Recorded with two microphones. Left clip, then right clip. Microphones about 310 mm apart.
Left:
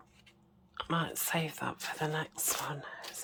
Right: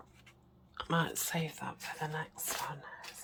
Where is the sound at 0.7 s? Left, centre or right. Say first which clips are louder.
Even; centre; by 3.0 s left.